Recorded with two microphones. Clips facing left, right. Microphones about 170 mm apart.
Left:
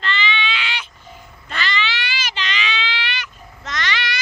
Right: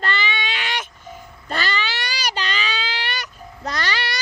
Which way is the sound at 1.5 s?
40° right (ahead or behind).